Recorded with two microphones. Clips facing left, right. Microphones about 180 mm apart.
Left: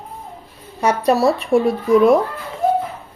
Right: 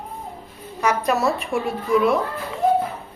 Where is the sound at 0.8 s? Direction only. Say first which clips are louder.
Left 5 dB; 30° left (ahead or behind).